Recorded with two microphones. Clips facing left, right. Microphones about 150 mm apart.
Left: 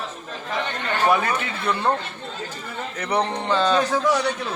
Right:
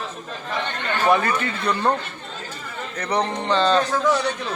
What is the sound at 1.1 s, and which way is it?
Speech, centre (ahead or behind).